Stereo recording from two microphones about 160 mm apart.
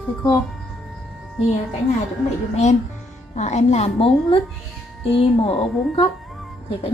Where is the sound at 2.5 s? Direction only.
45° left (ahead or behind).